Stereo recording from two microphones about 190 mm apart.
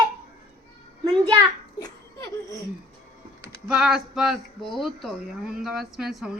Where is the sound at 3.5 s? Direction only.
5° right (ahead or behind).